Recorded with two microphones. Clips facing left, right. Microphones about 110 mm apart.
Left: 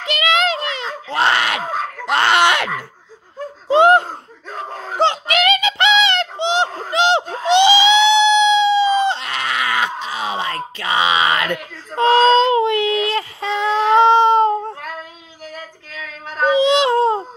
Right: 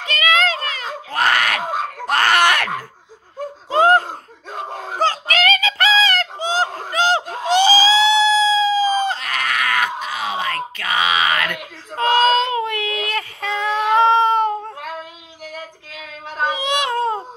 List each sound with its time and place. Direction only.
0.0 s a sound: 25° left (ahead or behind)
2.0 s speech: 20° left (ahead or behind)
3.7 s laughter: 25° left (ahead or behind)
4.9 s music: 20° left (ahead or behind)
6.0 s a sound: 25° left (ahead or behind)
10.0 s groan: 30° left (ahead or behind)
11.9 s child singing: 30° left (ahead or behind)
16.6 s baby cry: 30° left (ahead or behind)